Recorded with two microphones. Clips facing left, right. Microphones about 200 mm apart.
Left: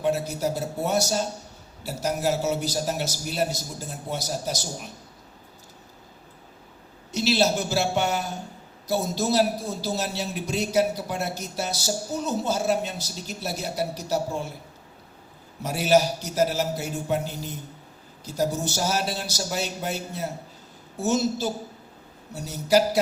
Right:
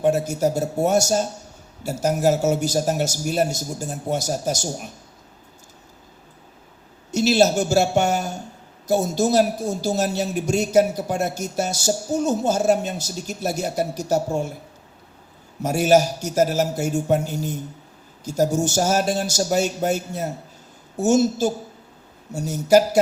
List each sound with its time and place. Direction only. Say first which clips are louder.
0.0 s a woman's voice: right 5 dB; 45° right (ahead or behind)
7.1 s a woman's voice: right 5 dB; 45° right (ahead or behind)
15.6 s a woman's voice: right 4 dB; 45° right (ahead or behind)